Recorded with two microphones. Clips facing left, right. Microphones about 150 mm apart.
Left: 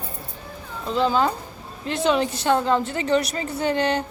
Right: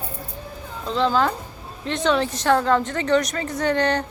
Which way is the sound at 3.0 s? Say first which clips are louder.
Right 1 dB; 30° left (ahead or behind).